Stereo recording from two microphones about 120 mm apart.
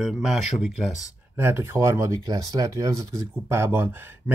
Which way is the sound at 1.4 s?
20° right (ahead or behind).